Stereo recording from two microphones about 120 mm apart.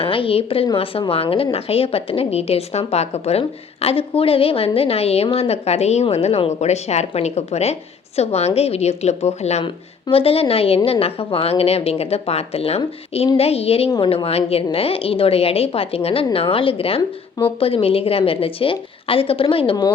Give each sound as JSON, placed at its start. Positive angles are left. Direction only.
{"t": 0.0, "sound": "a woman's voice", "side_deg": 50}
{"t": 9.6, "sound": "a woman's voice", "side_deg": 50}
{"t": 13.9, "sound": "a woman's voice", "side_deg": 45}